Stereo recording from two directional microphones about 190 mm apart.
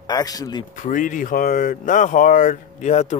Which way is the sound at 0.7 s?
45° left (ahead or behind).